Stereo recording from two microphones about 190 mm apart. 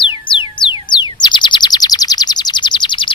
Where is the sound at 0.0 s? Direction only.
25° left (ahead or behind).